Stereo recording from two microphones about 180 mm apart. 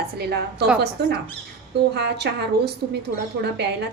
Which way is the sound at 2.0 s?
65° right (ahead or behind).